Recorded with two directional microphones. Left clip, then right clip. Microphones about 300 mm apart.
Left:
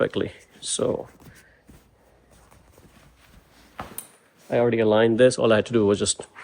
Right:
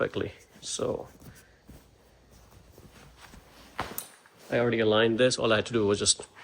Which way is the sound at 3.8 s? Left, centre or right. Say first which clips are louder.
Right 2 dB; right.